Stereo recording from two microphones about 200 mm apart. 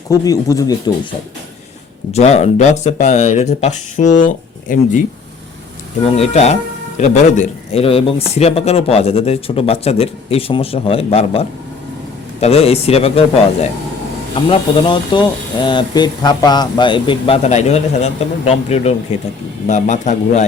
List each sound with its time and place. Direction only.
0.1 s speech: 15° left (ahead or behind)
2.1 s speech: 30° left (ahead or behind)
6.1 s speech: 30° left (ahead or behind)